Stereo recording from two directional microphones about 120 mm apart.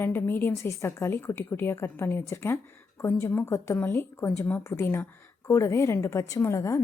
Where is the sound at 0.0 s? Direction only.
20° left (ahead or behind).